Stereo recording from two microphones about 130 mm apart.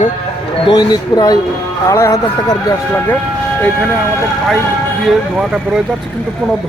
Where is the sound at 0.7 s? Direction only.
30° left (ahead or behind).